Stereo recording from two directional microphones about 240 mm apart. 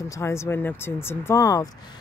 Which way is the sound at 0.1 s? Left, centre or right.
Centre.